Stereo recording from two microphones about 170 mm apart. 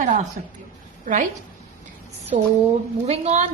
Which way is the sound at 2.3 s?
40° right (ahead or behind).